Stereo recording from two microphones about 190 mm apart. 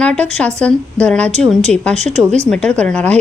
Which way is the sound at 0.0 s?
5° left (ahead or behind).